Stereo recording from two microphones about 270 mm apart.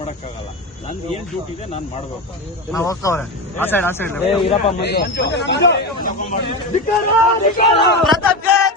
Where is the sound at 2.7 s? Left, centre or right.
Centre.